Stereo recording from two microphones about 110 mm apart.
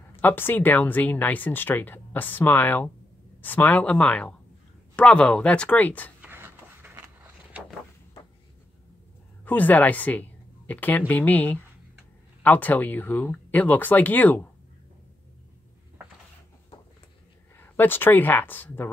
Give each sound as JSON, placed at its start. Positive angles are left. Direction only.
{"t": 0.1, "sound": "speech", "side_deg": 20}
{"t": 6.2, "sound": "a sound", "side_deg": -20}
{"t": 9.4, "sound": "speech", "side_deg": 15}
{"t": 17.6, "sound": "speech", "side_deg": 20}